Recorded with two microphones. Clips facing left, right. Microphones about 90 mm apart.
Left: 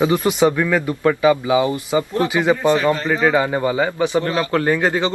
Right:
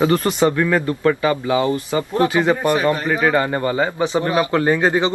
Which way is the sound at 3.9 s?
20° right (ahead or behind).